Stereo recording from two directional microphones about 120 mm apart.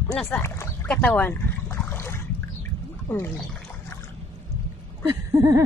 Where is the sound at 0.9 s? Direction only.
10° left (ahead or behind).